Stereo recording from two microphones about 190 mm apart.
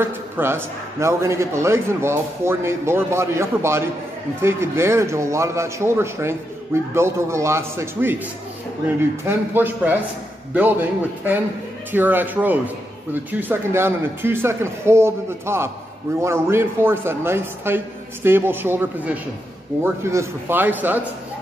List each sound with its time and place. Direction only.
0.0 s a man's voice: 10° right (ahead or behind)